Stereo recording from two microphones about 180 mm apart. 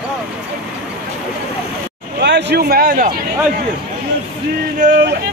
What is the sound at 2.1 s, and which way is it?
Speech, 70° right (ahead or behind).